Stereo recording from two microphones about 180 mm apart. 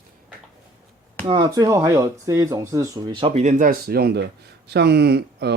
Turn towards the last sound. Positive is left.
turn(degrees=-65)  # may be behind; listen again after turning